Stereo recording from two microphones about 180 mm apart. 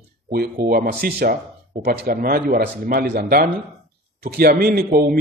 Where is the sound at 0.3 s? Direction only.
60° right (ahead or behind).